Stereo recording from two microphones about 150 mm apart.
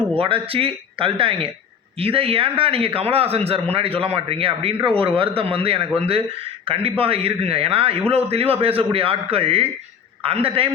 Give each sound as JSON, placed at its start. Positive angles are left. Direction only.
{"t": 0.1, "sound": "a man's voice", "side_deg": -35}